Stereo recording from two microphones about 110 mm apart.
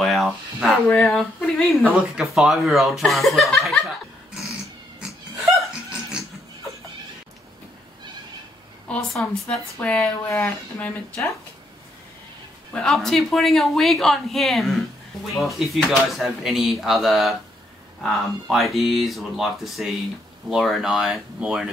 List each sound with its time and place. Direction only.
0.0 s a sound: centre (ahead or behind)
1.0 s speech: 5° left (ahead or behind)
1.9 s speech: 10° right (ahead or behind)
5.0 s cat: 10° right (ahead or behind)
5.4 s laughter: 5° right (ahead or behind)
8.8 s speech: 10° left (ahead or behind)
10.2 s speech: 20° left (ahead or behind)
12.7 s speech: 5° left (ahead or behind)